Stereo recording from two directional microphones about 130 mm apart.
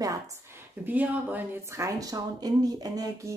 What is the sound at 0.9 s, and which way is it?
Speech, 15° right (ahead or behind).